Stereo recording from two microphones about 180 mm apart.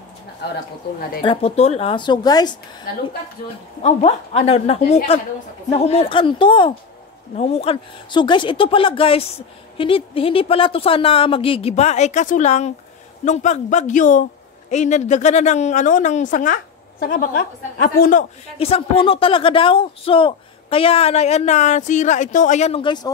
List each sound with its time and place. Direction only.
1.2 s speech: 30° left (ahead or behind)
3.8 s a woman's voice: 35° left (ahead or behind)
18.6 s speech: 30° left (ahead or behind)